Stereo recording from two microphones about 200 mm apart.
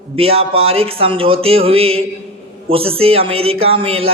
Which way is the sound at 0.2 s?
30° right (ahead or behind).